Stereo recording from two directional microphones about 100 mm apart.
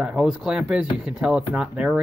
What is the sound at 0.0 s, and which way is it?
Speech, 5° right (ahead or behind).